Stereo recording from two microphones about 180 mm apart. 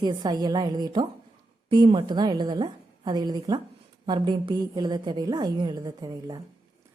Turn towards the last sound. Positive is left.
turn(degrees=-20)  # may be behind; listen again after turning